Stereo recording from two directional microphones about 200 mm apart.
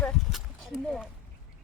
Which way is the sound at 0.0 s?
Centre (ahead or behind).